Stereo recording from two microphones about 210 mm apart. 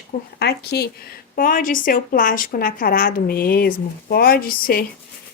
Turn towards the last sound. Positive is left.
turn(degrees=45)  # may be behind; listen again after turning